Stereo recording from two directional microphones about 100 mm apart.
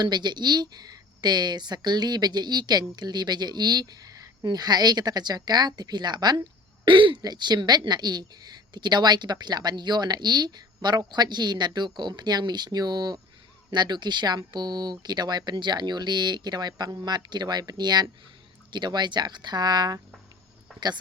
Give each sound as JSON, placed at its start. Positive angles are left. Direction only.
{"t": 0.0, "sound": "speech", "side_deg": -45}